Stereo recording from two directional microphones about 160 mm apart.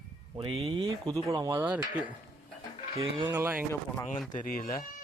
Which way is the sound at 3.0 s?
35° right (ahead or behind).